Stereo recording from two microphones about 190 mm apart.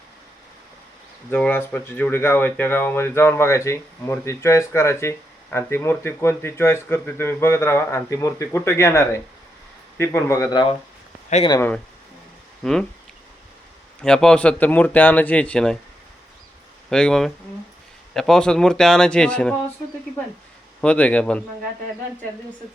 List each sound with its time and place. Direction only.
1.3 s speech: 10° left (ahead or behind)
12.6 s speech: 5° left (ahead or behind)
14.0 s speech: 5° left (ahead or behind)
16.9 s speech: 5° left (ahead or behind)
20.8 s speech: 5° left (ahead or behind)